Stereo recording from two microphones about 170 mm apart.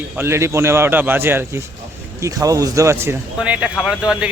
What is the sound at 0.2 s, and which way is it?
Speech, 15° right (ahead or behind).